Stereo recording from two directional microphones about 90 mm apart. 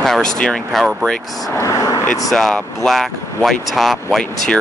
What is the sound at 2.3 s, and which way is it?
Speech, 5° left (ahead or behind).